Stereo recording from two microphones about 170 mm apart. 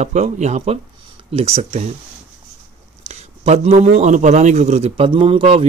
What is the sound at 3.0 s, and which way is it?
Speech, 40° right (ahead or behind).